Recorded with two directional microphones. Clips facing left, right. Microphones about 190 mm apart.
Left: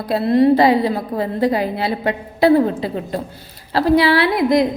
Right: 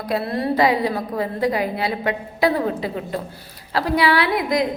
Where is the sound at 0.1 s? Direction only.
25° left (ahead or behind).